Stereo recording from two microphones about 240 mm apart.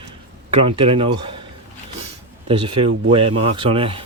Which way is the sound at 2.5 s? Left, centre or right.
Right.